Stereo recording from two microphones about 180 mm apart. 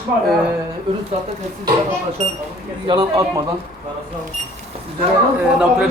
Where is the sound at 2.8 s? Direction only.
20° right (ahead or behind).